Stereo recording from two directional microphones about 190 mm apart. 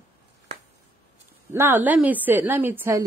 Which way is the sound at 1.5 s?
10° right (ahead or behind).